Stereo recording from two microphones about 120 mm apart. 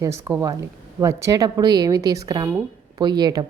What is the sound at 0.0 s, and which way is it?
A woman's voice, 25° right (ahead or behind).